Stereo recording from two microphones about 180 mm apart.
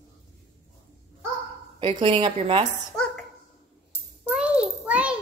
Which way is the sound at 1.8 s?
25° right (ahead or behind).